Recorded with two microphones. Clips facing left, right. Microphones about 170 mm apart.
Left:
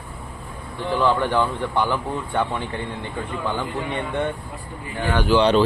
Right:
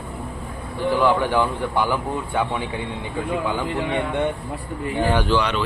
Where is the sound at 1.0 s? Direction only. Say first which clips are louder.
Even; 10° right (ahead or behind).